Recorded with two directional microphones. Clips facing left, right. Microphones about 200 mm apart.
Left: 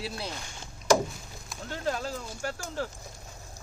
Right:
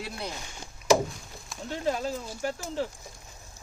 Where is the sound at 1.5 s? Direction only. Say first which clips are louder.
Right 2 dB; 5° right (ahead or behind).